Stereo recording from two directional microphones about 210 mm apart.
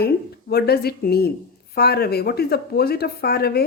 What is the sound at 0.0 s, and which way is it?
Speech, 50° left (ahead or behind).